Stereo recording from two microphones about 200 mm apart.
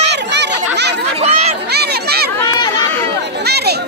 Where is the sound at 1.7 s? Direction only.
55° right (ahead or behind).